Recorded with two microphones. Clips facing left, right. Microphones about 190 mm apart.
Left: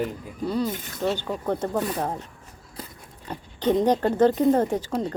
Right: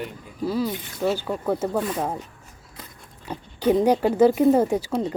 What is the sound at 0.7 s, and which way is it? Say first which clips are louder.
Speech: right 1 dB; 45° left (ahead or behind).